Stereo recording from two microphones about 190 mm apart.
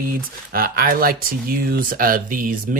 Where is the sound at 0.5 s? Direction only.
50° right (ahead or behind).